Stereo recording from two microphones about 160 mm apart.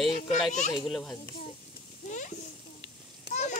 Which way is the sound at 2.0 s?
50° left (ahead or behind).